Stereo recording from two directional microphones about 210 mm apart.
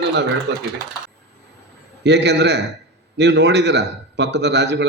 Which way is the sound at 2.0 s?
55° right (ahead or behind).